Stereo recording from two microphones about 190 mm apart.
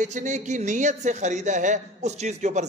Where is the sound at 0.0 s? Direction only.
40° right (ahead or behind).